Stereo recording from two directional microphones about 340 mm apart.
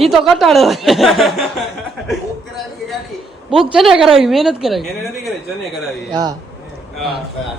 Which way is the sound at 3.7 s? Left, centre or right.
Centre.